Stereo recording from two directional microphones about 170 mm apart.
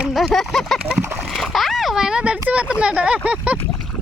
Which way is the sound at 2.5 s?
5° right (ahead or behind).